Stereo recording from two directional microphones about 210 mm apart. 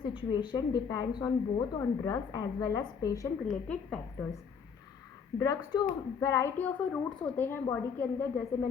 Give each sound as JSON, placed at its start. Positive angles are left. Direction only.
{"t": 0.0, "sound": "speech", "side_deg": 25}
{"t": 3.7, "sound": "a woman's voice", "side_deg": 5}
{"t": 5.4, "sound": "speech", "side_deg": 15}